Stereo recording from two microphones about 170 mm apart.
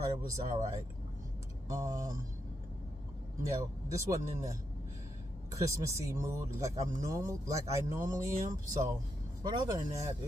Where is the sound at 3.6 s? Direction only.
20° right (ahead or behind).